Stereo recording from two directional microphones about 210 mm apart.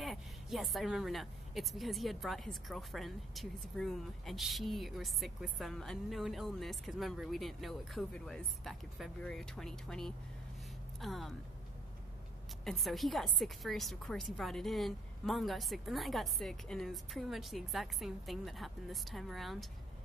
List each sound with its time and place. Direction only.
0.0 s a woman's voice: centre (ahead or behind)
12.6 s a woman's voice: centre (ahead or behind)